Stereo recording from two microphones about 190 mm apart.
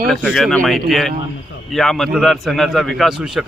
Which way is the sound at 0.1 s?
5° left (ahead or behind).